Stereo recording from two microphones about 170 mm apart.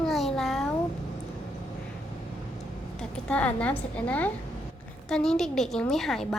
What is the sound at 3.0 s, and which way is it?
A woman's voice, 5° left (ahead or behind).